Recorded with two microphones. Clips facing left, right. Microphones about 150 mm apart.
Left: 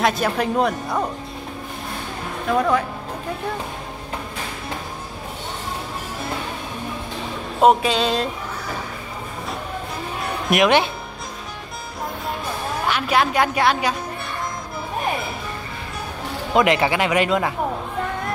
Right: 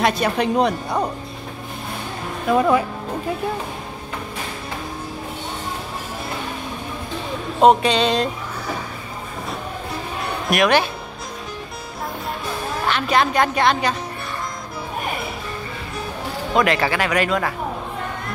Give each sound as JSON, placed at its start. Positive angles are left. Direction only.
{"t": 0.0, "sound": "a woman's voice", "side_deg": 0}
{"t": 2.4, "sound": "speech", "side_deg": -5}
{"t": 7.6, "sound": "a woman's voice", "side_deg": 5}
{"t": 10.5, "sound": "speech", "side_deg": 20}
{"t": 12.8, "sound": "speech", "side_deg": 10}
{"t": 16.5, "sound": "speech", "side_deg": 20}